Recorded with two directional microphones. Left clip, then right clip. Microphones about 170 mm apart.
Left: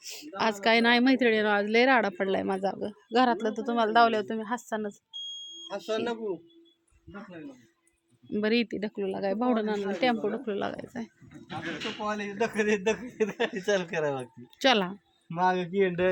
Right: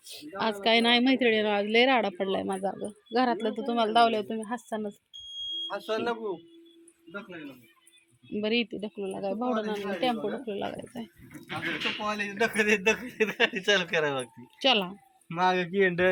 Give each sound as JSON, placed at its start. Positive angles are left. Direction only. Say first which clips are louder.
{"t": 0.0, "sound": "a sound", "louder": "left 2 dB", "side_deg": 10}
{"t": 0.6, "sound": "speech", "louder": "even", "side_deg": 5}
{"t": 3.6, "sound": "speech", "louder": "even", "side_deg": 0}
{"t": 5.6, "sound": "speech", "louder": "left 1 dB", "side_deg": 65}
{"t": 8.3, "sound": "speech", "louder": "left 1 dB", "side_deg": 20}
{"t": 11.9, "sound": "speech", "louder": "right 1 dB", "side_deg": -15}
{"t": 15.4, "sound": "speech", "louder": "right 1 dB", "side_deg": -20}